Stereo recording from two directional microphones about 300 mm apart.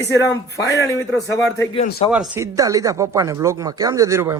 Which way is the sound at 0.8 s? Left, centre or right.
Centre.